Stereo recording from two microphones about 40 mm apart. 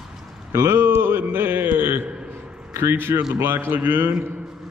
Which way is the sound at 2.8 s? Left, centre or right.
Right.